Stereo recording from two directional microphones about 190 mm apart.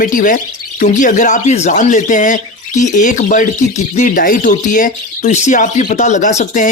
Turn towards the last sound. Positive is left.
turn(degrees=40)  # may be behind; listen again after turning